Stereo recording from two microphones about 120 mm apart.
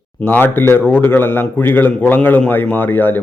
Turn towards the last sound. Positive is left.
turn(degrees=15)  # may be behind; listen again after turning